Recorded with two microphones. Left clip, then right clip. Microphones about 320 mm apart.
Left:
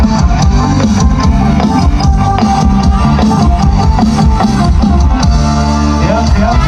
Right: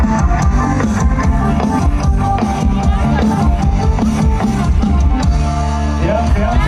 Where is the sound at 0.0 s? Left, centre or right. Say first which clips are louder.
Left 3 dB; centre.